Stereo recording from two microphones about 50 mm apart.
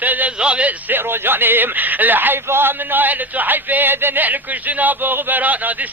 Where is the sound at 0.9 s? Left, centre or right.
Right.